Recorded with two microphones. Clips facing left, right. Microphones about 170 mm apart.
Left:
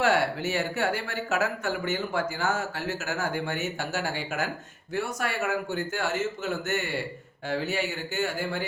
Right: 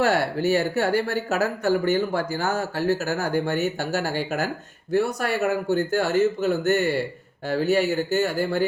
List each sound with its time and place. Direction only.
0.0 s speech: 35° right (ahead or behind)